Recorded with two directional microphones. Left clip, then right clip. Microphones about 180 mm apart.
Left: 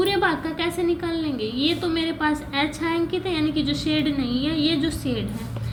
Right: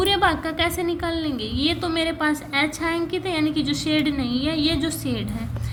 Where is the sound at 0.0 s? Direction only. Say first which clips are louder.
Right 2 dB; 40° right (ahead or behind).